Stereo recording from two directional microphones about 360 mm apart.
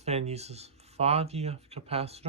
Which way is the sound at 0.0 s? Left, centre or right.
Centre.